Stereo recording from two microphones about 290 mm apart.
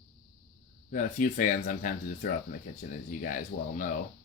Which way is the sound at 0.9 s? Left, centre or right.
Left.